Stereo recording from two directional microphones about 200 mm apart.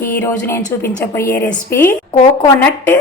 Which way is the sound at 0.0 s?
10° left (ahead or behind).